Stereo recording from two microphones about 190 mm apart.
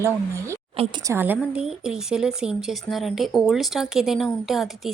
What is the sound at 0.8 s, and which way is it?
Speech, 25° right (ahead or behind).